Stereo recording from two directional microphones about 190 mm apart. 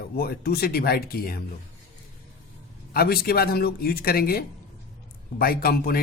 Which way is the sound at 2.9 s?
55° left (ahead or behind).